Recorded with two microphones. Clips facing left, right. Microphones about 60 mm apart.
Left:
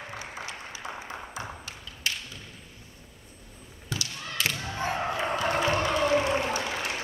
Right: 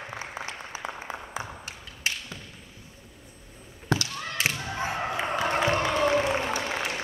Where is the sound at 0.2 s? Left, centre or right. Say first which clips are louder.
Right 2 dB; right.